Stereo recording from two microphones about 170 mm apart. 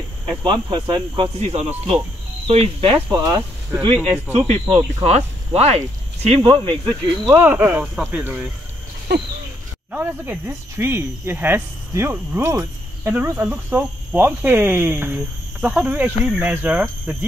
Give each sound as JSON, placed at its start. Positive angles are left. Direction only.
{"t": 0.4, "sound": "speech", "side_deg": -30}
{"t": 1.4, "sound": "speech", "side_deg": -40}
{"t": 3.1, "sound": "speech", "side_deg": -20}
{"t": 4.5, "sound": "speech", "side_deg": -35}
{"t": 6.9, "sound": "speech", "side_deg": -15}
{"t": 9.1, "sound": "a sound", "side_deg": -80}
{"t": 9.8, "sound": "speech", "side_deg": -10}